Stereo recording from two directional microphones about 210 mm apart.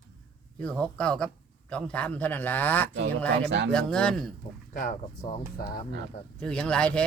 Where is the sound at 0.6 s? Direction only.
5° left (ahead or behind).